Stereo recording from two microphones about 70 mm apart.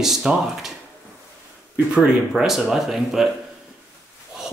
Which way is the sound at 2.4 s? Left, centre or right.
Centre.